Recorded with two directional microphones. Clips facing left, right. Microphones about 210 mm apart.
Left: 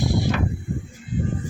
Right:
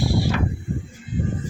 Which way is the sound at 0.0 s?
20° left (ahead or behind).